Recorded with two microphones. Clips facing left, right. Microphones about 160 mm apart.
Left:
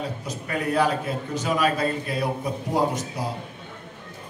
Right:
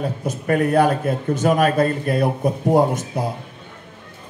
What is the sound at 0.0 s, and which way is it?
A man's voice, 50° right (ahead or behind).